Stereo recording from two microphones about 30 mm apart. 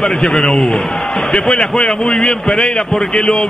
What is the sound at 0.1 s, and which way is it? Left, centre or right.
A man's voice, left.